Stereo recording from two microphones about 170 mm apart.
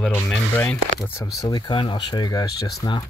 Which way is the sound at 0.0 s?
5° left (ahead or behind).